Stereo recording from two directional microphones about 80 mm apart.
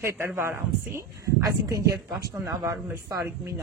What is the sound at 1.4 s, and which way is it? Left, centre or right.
Speech, right.